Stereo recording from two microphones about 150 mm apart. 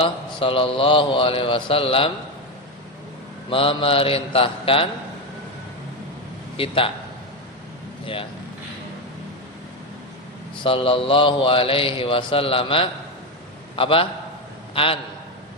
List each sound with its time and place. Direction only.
0.0 s speech: 35° left (ahead or behind)
3.5 s speech: 35° left (ahead or behind)
6.6 s speech: 35° left (ahead or behind)
8.0 s speech: 35° left (ahead or behind)
10.6 s speech: 35° left (ahead or behind)